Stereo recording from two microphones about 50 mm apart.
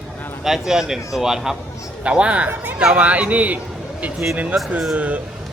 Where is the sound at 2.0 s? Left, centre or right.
Right.